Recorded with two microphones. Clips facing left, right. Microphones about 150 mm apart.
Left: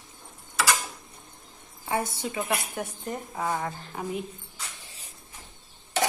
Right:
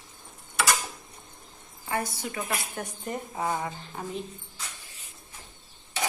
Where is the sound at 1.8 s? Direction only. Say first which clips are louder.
Left 2 dB; 20° left (ahead or behind); by 4.0 s 5° right (ahead or behind).